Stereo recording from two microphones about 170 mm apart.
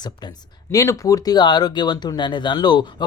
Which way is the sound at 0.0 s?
25° left (ahead or behind).